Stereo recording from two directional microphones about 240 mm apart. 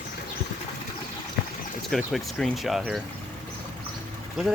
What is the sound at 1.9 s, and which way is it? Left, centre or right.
Speech, centre.